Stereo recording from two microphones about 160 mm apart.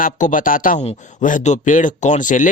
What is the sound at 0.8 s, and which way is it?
Speech, 45° left (ahead or behind).